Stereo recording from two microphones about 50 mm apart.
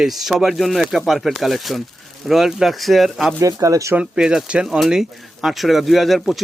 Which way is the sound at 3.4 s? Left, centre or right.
Right.